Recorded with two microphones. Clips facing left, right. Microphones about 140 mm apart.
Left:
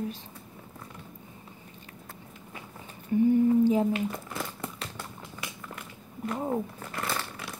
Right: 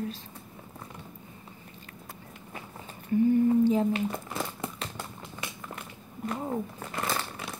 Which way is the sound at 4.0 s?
25° right (ahead or behind).